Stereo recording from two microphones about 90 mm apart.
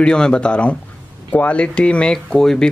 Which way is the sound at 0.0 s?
10° left (ahead or behind).